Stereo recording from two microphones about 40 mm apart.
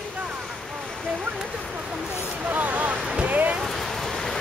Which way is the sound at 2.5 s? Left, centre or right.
Right.